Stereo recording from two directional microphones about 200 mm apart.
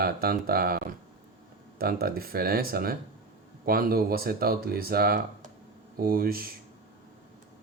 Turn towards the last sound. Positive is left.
turn(degrees=-45)  # may be behind; listen again after turning